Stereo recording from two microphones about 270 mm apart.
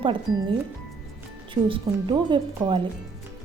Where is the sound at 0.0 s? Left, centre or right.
Centre.